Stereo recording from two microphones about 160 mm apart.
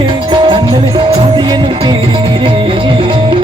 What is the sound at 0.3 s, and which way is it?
Music, 30° right (ahead or behind).